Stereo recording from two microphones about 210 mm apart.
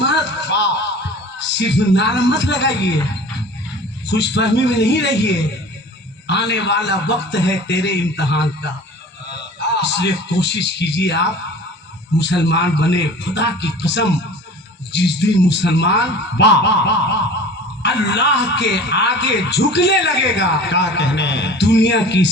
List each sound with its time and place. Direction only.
0.0 s a sound: 55° left (ahead or behind)
1.4 s a man's voice: 55° left (ahead or behind)
4.0 s a man's voice: 55° left (ahead or behind)